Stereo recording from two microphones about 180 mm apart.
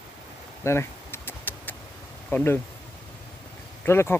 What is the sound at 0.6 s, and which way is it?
Vehicle, 15° left (ahead or behind).